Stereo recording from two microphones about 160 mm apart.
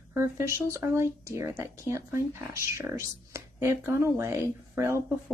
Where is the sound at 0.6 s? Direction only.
15° right (ahead or behind).